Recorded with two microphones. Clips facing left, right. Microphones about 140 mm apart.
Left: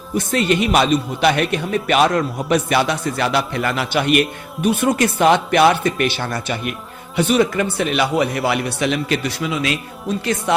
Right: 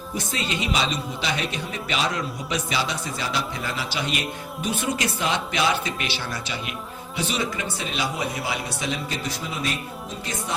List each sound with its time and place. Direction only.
0.2 s a man's voice: 60° left (ahead or behind); by 9.7 s 90° left